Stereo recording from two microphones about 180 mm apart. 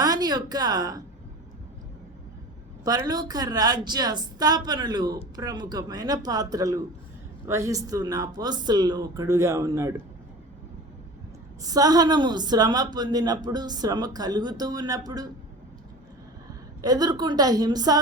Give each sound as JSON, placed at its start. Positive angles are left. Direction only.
{"t": 0.0, "sound": "a woman's voice", "side_deg": -20}
{"t": 2.8, "sound": "a woman's voice", "side_deg": -20}
{"t": 11.6, "sound": "a woman's voice", "side_deg": -20}
{"t": 16.8, "sound": "a woman's voice", "side_deg": -20}